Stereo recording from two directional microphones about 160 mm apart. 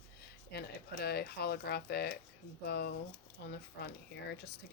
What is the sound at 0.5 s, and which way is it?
Speech, 80° left.